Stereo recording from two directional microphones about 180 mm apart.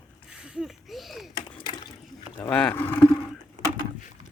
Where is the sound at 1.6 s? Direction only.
25° left (ahead or behind).